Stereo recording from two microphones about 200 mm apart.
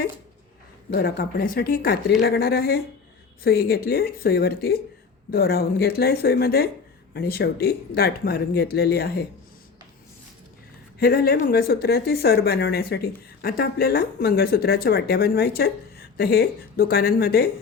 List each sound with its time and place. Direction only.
0.9 s speech: 50° left (ahead or behind)
11.0 s speech: 50° left (ahead or behind)